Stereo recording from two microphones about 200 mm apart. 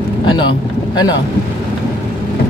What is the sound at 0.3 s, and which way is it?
Vehicle, 25° left (ahead or behind).